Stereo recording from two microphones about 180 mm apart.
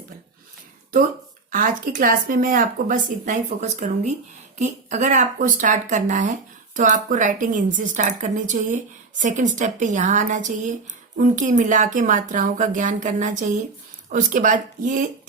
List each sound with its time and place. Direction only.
1.5 s speech: 50° right (ahead or behind)